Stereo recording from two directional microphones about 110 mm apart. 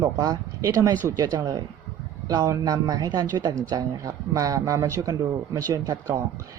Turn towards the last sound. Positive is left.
turn(degrees=-30)  # may be behind; listen again after turning